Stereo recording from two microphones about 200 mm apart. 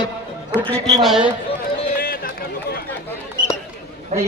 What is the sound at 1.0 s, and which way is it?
Speech, 5° right (ahead or behind).